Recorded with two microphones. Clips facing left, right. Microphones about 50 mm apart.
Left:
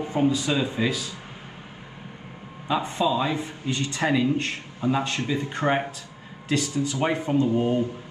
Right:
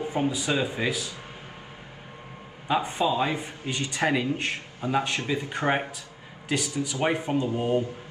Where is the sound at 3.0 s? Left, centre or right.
Right.